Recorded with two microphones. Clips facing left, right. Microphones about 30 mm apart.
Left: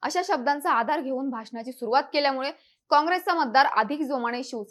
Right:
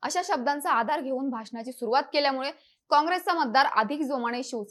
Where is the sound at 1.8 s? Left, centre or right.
Centre.